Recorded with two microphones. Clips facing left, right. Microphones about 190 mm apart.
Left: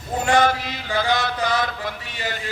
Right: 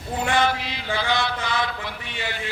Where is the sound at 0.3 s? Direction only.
45° left (ahead or behind).